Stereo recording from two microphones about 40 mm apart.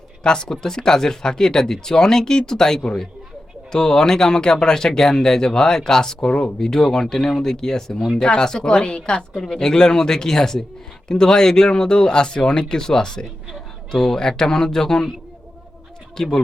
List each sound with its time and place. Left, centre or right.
0.2 s speech: centre
6.2 s speech: left
16.1 s speech: centre